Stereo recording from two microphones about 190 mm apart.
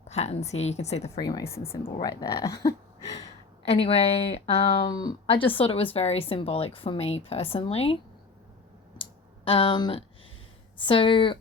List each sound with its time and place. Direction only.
0.1 s a woman's voice: 35° left (ahead or behind)
1.2 s speech: 20° left (ahead or behind)
3.7 s speech: 30° left (ahead or behind)
9.0 s clicking: 30° left (ahead or behind)
10.8 s speech: 25° left (ahead or behind)